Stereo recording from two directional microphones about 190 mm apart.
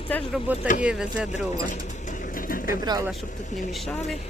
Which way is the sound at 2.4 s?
50° left (ahead or behind).